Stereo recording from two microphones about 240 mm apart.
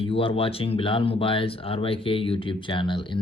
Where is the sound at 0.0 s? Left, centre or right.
Left.